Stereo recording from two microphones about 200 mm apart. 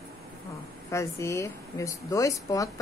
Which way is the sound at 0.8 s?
15° left (ahead or behind).